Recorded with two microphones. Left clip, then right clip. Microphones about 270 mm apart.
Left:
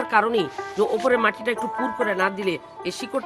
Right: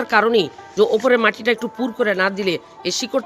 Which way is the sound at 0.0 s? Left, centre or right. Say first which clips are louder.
Right 4 dB; centre.